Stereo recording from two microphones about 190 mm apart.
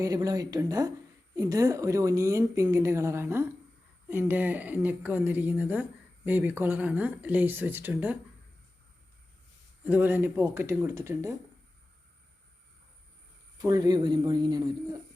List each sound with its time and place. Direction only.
0.0 s a woman's voice: 20° right (ahead or behind)
9.8 s a woman's voice: 10° right (ahead or behind)
13.6 s speech: 20° right (ahead or behind)